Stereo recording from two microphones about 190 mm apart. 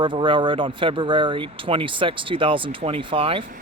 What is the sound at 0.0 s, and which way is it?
A man's voice, 25° right (ahead or behind).